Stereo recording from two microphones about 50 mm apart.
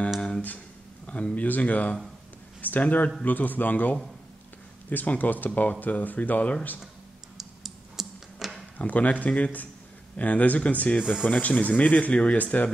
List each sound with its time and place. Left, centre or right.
1.0 s speech: left
7.3 s typing: centre
8.7 s speech: left